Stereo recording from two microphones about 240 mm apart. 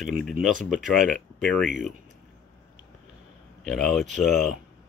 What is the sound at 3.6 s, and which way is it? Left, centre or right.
Speech, centre.